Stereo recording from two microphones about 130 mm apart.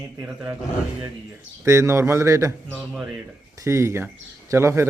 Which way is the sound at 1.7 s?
20° right (ahead or behind).